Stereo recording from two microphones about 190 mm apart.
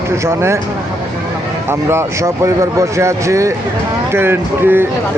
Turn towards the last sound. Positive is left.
turn(degrees=-10)  # may be behind; listen again after turning